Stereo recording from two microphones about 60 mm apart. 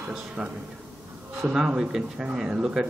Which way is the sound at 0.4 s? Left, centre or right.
Centre.